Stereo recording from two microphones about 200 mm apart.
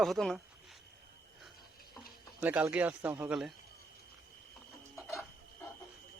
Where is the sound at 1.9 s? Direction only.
5° right (ahead or behind).